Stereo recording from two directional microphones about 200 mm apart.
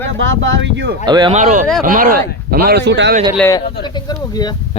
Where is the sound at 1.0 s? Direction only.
20° right (ahead or behind).